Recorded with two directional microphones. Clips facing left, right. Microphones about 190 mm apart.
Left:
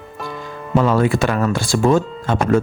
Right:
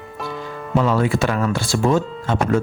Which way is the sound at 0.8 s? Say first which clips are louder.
Left 2 dB; 50° left (ahead or behind).